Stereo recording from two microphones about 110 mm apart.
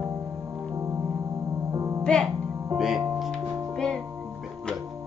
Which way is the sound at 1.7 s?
35° right (ahead or behind).